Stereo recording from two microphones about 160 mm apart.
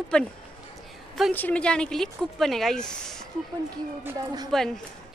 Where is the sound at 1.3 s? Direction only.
10° left (ahead or behind).